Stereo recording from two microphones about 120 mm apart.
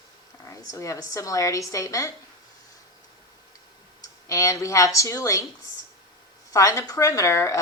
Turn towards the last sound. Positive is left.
turn(degrees=25)  # may be behind; listen again after turning